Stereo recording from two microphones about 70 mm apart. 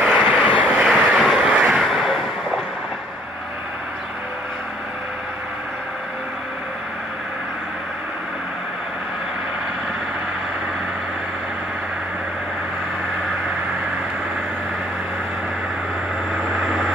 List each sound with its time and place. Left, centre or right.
0.0 s vehicle: centre
1.5 s vehicle: centre
1.9 s a sound: centre
16.5 s vehicle: centre